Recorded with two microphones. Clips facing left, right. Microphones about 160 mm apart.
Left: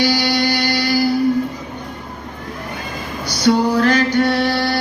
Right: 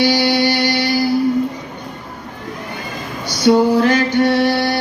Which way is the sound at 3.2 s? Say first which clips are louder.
Right 3 dB; 20° right (ahead or behind).